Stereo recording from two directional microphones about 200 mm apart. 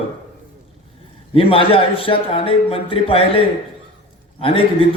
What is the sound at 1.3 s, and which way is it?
A man's voice, 25° left (ahead or behind).